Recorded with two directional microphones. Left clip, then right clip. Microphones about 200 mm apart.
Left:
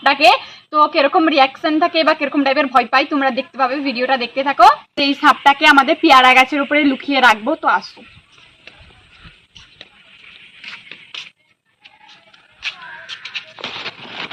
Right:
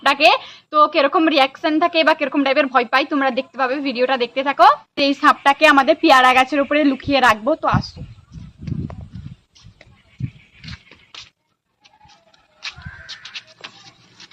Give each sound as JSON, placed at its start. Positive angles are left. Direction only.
{"t": 0.0, "sound": "a woman's voice", "side_deg": 0}
{"t": 5.1, "sound": "a woman's voice", "side_deg": -20}
{"t": 12.5, "sound": "a sound", "side_deg": 5}